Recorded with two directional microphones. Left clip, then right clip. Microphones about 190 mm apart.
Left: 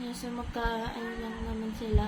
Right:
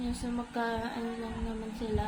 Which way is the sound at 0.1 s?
15° left (ahead or behind).